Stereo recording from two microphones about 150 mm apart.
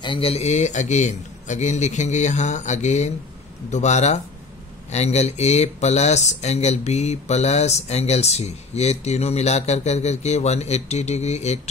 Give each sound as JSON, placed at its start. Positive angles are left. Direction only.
{"t": 0.0, "sound": "speech", "side_deg": 35}